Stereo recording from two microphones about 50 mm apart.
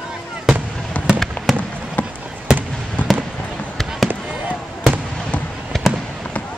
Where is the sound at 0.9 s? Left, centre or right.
Left.